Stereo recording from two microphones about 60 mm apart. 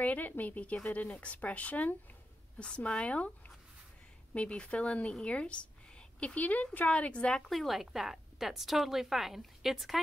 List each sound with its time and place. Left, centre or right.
0.0 s speech: left; by 9.9 s centre